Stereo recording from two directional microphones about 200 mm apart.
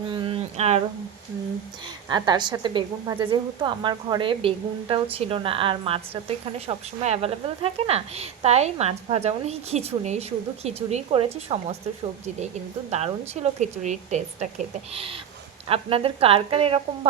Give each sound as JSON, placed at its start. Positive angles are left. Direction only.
{"t": 0.1, "sound": "a sound", "side_deg": -25}
{"t": 2.0, "sound": "a woman's voice", "side_deg": -20}
{"t": 12.9, "sound": "a woman's voice", "side_deg": -35}